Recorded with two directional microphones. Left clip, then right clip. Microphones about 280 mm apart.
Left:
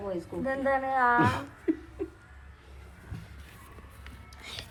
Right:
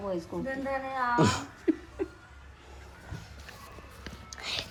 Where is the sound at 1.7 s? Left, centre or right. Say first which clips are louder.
Right 1 dB; right.